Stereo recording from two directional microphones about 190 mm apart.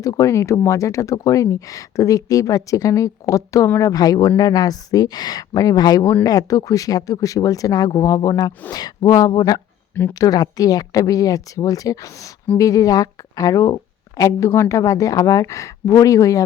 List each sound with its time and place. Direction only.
0.0 s speech: 15° left (ahead or behind)